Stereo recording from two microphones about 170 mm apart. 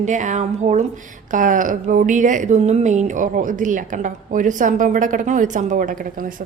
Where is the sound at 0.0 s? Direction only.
45° right (ahead or behind).